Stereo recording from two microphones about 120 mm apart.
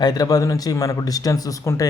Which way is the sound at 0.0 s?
35° left (ahead or behind).